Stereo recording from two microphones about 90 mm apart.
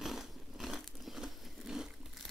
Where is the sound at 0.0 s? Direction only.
Centre (ahead or behind).